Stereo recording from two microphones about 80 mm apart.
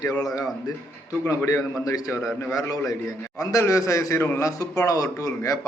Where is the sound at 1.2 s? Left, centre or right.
Left.